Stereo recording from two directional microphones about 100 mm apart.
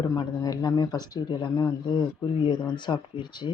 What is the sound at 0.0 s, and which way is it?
Speech, 40° left (ahead or behind).